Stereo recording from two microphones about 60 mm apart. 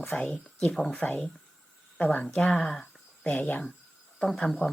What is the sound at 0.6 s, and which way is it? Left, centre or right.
Speech, centre.